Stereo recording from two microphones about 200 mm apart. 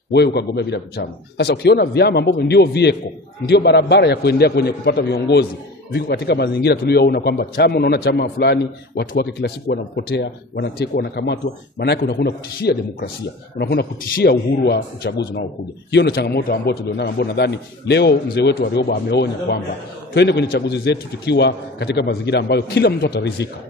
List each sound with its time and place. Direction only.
0.1 s a man's voice: 55° left (ahead or behind)